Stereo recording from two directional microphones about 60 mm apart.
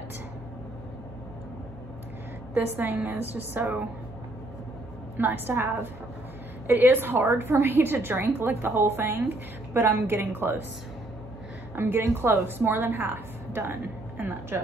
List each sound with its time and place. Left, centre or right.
2.5 s a woman's voice: right
5.1 s a woman's voice: right
11.7 s a woman's voice: right